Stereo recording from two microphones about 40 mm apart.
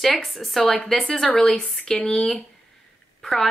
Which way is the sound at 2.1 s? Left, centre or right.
Centre.